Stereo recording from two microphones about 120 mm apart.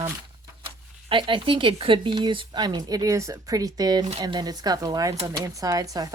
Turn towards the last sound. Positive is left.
turn(degrees=-30)  # may be behind; listen again after turning